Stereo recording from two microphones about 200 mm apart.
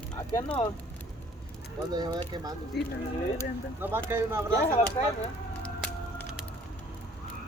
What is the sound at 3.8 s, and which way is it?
Speech, 10° right (ahead or behind).